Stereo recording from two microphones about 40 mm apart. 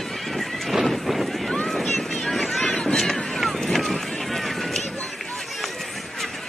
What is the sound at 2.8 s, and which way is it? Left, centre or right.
Run, centre.